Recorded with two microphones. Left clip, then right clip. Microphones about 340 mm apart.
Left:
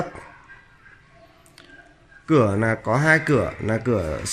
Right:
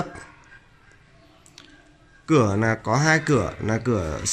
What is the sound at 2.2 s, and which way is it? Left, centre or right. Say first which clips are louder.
Speech: left 1 dB; centre.